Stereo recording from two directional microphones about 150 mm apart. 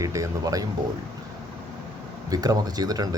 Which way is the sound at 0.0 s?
20° right (ahead or behind).